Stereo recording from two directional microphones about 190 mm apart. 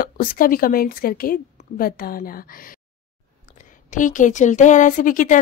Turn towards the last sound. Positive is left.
turn(degrees=45)  # may be behind; listen again after turning